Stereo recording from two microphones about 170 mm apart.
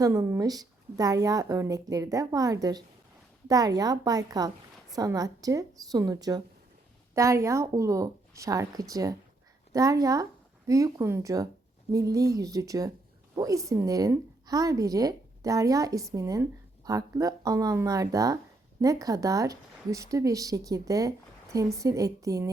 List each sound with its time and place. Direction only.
0.0 s a woman's voice: 15° right (ahead or behind)